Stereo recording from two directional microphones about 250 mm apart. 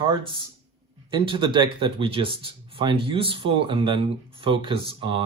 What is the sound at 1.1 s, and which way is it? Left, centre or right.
Speech, centre.